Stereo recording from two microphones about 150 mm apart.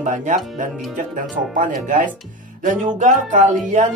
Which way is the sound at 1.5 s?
65° right (ahead or behind).